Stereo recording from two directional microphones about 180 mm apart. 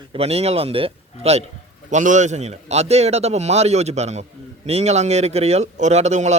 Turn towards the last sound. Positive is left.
turn(degrees=-40)  # may be behind; listen again after turning